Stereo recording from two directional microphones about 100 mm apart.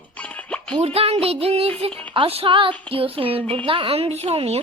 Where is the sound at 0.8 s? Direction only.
90° right.